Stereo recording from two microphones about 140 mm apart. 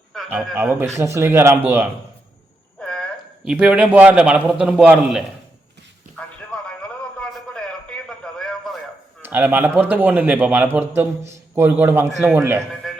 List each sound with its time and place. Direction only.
0.3 s a man's voice: 15° right (ahead or behind)
2.8 s a sound: 5° left (ahead or behind)
3.4 s a man's voice: 5° right (ahead or behind)
6.1 s a sound: 5° left (ahead or behind)
9.2 s a man's voice: 15° right (ahead or behind)
12.8 s music: 5° left (ahead or behind)